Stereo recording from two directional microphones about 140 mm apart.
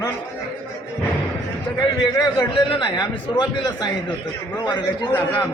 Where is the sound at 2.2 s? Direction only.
30° left (ahead or behind).